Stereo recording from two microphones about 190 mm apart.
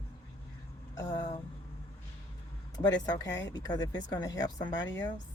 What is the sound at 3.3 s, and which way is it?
Speech, 70° left (ahead or behind).